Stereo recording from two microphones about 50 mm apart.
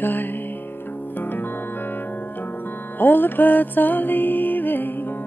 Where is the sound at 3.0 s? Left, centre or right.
Left.